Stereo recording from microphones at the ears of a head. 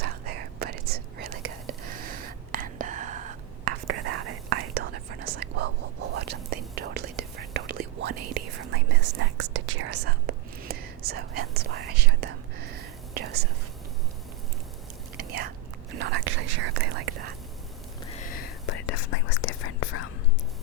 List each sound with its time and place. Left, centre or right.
0.0 s whispering: right
15.2 s whispering: right
18.1 s whispering: left